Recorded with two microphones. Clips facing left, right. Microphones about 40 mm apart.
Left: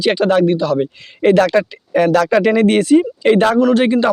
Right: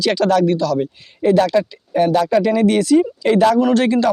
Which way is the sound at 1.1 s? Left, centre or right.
Left.